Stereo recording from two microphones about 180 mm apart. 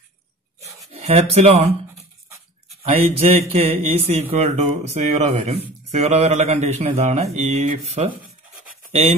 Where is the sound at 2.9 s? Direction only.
35° right (ahead or behind).